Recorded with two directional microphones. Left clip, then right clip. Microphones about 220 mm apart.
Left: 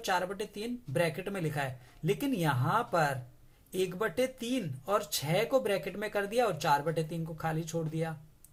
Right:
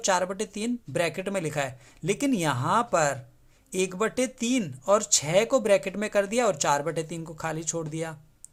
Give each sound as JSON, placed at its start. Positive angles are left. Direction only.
{"t": 0.0, "sound": "speech", "side_deg": -35}